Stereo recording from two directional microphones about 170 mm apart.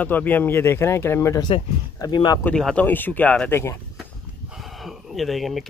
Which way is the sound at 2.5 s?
5° left (ahead or behind).